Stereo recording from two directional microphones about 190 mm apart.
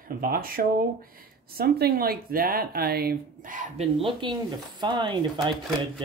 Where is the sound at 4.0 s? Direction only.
25° right (ahead or behind).